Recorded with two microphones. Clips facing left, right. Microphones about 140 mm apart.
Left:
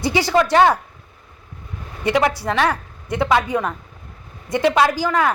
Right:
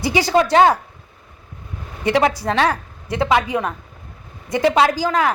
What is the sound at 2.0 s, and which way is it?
Speech, 25° right (ahead or behind).